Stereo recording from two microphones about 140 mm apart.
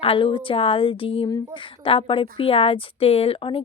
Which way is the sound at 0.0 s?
40° left (ahead or behind).